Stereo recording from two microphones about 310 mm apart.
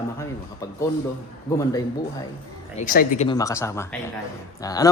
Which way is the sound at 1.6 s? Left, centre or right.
Centre.